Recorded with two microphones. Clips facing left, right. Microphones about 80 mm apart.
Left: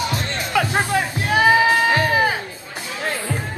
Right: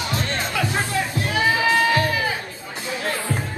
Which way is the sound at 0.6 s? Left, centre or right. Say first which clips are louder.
Left 6 dB; left.